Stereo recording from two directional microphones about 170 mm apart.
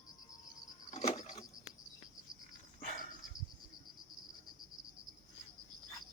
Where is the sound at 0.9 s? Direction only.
40° left (ahead or behind).